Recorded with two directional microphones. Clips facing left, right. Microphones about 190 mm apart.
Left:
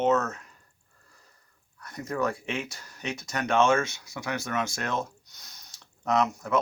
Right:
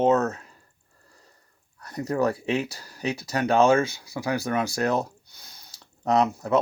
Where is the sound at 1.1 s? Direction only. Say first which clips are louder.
Right 4 dB; 30° right (ahead or behind).